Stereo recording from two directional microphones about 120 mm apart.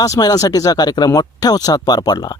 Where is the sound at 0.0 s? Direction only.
30° left (ahead or behind).